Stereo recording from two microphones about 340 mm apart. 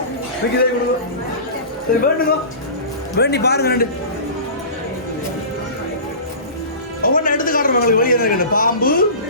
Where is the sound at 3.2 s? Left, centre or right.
Left.